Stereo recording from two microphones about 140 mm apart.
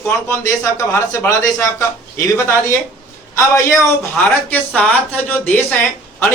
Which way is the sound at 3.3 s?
20° left (ahead or behind).